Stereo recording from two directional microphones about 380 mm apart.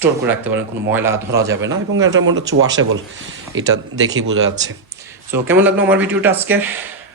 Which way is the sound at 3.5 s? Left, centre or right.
Right.